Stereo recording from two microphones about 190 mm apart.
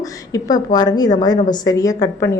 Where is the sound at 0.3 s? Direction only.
20° left (ahead or behind).